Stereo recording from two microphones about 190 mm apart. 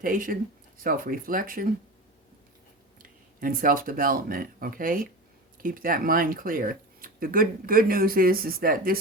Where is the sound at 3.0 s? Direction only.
45° right (ahead or behind).